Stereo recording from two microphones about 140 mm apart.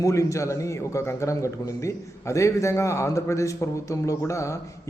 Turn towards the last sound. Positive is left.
turn(degrees=20)  # may be behind; listen again after turning